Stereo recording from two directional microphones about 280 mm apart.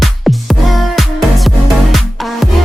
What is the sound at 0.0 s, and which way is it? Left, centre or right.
Music, centre.